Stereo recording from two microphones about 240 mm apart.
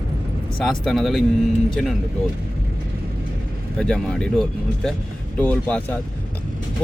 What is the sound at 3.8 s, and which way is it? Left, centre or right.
Speech, centre.